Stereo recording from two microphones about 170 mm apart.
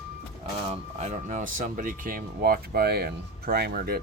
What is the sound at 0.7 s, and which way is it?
Speech, 45° right (ahead or behind).